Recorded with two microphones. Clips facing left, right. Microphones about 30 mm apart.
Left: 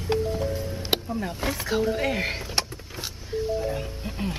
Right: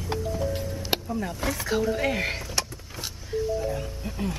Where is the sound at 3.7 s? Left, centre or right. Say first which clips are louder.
Left 1 dB; centre.